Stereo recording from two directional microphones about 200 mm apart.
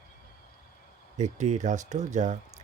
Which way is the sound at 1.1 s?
35° right (ahead or behind).